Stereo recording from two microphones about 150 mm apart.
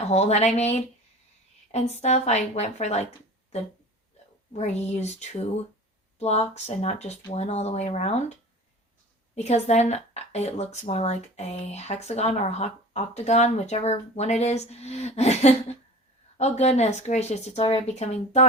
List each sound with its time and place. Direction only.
0.0 s speech: 45° left (ahead or behind)
4.5 s speech: 45° left (ahead or behind)
9.3 s speech: 45° left (ahead or behind)